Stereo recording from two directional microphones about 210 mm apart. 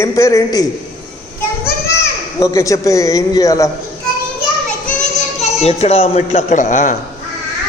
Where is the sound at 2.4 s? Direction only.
15° left (ahead or behind).